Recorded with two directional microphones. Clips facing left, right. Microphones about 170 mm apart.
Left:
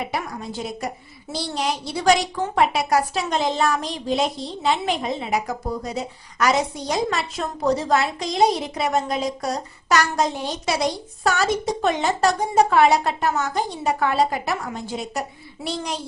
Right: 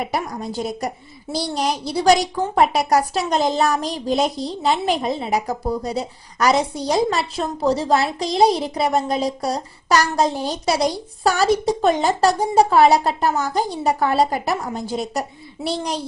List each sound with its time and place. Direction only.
0.1 s a woman's voice: 35° right (ahead or behind)